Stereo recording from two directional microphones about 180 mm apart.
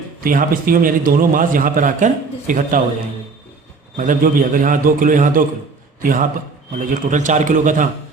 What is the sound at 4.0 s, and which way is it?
A man's voice, 50° right (ahead or behind).